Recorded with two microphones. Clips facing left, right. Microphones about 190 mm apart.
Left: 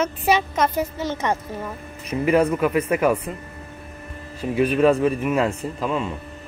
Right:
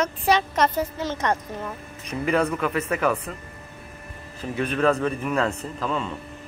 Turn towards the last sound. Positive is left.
turn(degrees=10)  # may be behind; listen again after turning